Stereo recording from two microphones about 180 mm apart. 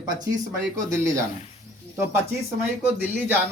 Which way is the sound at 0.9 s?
15° right (ahead or behind).